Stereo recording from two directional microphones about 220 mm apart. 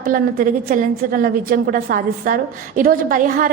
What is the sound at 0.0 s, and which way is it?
A woman's voice, 40° right (ahead or behind).